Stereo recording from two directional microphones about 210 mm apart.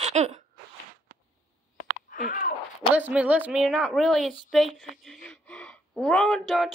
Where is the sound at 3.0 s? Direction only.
5° right (ahead or behind).